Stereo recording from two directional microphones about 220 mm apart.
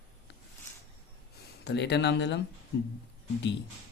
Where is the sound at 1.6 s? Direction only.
50° left (ahead or behind).